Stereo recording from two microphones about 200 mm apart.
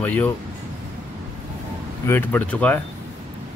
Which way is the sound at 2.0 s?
10° left (ahead or behind).